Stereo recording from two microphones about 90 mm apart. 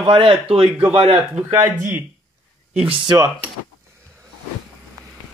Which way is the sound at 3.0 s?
55° right (ahead or behind).